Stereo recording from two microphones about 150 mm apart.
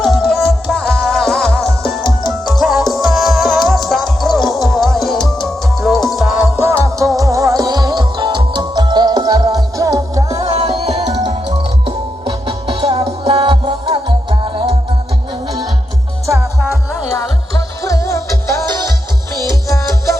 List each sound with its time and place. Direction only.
0.0 s music: centre (ahead or behind)
6.6 s music: 20° right (ahead or behind)
10.4 s music: 40° right (ahead or behind)
17.8 s music: 20° left (ahead or behind)